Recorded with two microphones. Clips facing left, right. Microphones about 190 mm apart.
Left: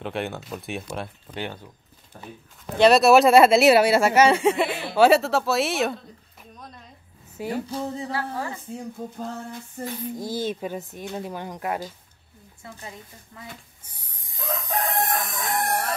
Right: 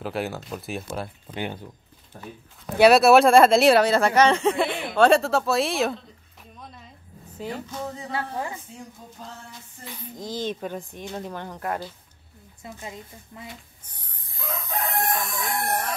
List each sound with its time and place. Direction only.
0.0 s speech: centre (ahead or behind)
2.8 s speech: centre (ahead or behind)
6.6 s a sound: centre (ahead or behind)
7.7 s speech: 35° left (ahead or behind)
8.1 s a woman's voice: 20° right (ahead or behind)
10.2 s speech: 10° left (ahead or behind)
12.6 s a woman's voice: 20° right (ahead or behind)
13.8 s crowing: 10° left (ahead or behind)